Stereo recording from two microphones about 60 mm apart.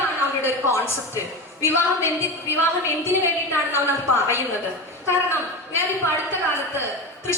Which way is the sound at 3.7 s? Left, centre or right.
Left.